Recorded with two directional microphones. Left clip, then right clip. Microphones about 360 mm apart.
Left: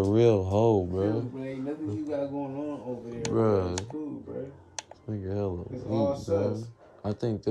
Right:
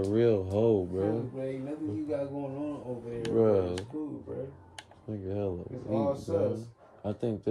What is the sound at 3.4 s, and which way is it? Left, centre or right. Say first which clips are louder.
Speech: even; left.